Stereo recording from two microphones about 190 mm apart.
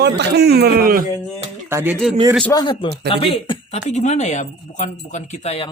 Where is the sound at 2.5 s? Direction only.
25° left (ahead or behind).